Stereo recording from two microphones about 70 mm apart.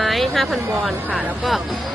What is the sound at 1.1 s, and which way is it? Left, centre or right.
Speech, centre.